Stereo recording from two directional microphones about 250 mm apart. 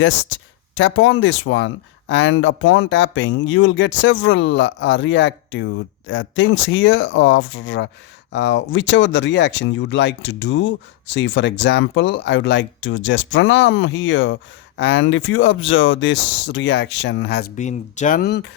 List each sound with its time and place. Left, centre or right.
0.8 s speech: left